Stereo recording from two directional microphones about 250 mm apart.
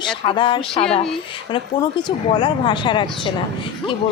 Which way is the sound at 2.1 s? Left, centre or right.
Centre.